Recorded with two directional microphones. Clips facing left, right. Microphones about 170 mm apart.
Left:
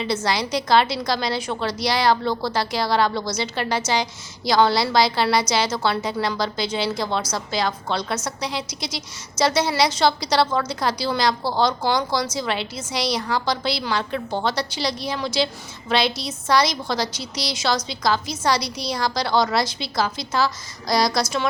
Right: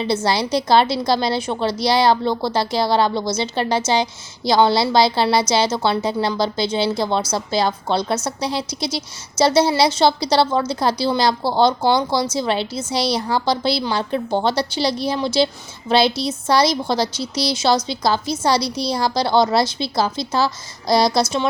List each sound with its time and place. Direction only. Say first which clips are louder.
0.0 s a woman's voice: right 4 dB; 30° right (ahead or behind)